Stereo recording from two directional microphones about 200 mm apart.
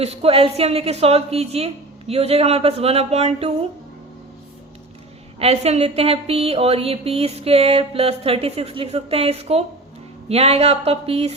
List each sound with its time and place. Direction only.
0.0 s a woman's voice: 30° right (ahead or behind)
5.4 s a woman's voice: 30° right (ahead or behind)